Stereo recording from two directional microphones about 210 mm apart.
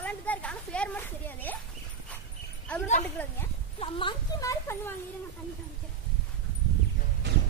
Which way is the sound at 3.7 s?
25° left (ahead or behind).